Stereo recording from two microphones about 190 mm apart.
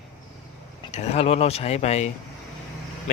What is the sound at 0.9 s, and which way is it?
Speech, 35° left (ahead or behind).